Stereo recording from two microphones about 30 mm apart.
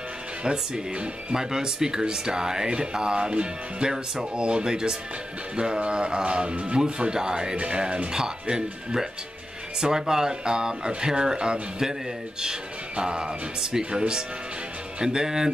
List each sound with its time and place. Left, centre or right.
0.4 s speech: right
3.8 s mantra: right
4.6 s speech: right
5.6 s mantra: right
6.8 s speech: right
7.5 s mantra: right
8.1 s speech: right
12.9 s speech: right